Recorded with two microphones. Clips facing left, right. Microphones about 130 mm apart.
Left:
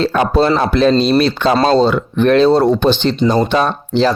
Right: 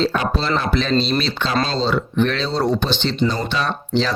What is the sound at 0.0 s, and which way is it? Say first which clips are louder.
Speech: left 7 dB; 55° left (ahead or behind).